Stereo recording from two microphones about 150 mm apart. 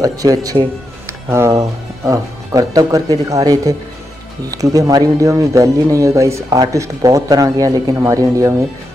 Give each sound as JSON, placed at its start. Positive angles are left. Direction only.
{"t": 0.0, "sound": "speech", "side_deg": -25}